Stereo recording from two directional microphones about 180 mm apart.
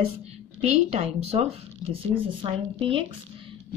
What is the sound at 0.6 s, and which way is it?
Speech, 35° right (ahead or behind).